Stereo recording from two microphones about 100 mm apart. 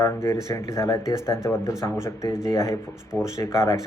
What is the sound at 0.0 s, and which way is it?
Speech, 30° left (ahead or behind).